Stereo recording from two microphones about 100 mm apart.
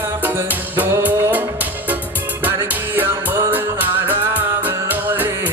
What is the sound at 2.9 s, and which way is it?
Music, 20° right (ahead or behind).